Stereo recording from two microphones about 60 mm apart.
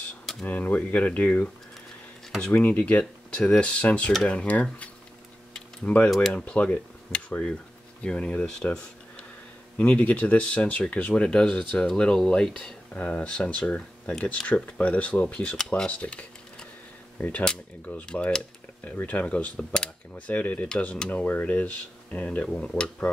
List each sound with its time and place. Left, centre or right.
0.5 s speech: left
2.5 s speech: left
6.0 s speech: centre
6.3 s speech: centre
9.8 s speech: left
15.9 s a sound: left
17.2 s speech: left
20.2 s speech: left